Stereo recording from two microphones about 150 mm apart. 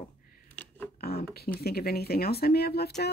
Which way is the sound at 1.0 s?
85° left.